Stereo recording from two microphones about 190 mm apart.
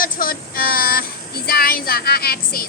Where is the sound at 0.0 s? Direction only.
50° left (ahead or behind).